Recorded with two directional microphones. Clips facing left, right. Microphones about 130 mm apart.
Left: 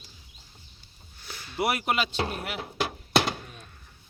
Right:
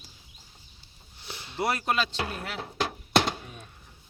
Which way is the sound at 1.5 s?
10° left (ahead or behind).